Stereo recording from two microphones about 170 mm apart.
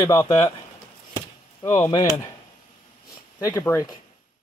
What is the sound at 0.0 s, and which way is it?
Speech, 25° left (ahead or behind).